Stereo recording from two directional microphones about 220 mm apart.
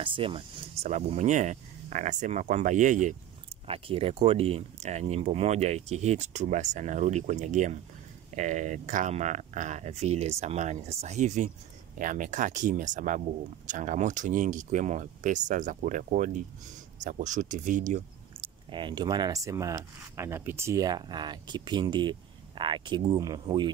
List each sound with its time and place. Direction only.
0.0 s speech: 25° right (ahead or behind)
18.7 s speech: 20° right (ahead or behind)